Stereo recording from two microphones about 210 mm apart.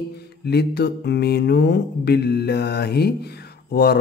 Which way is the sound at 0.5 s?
50° left (ahead or behind).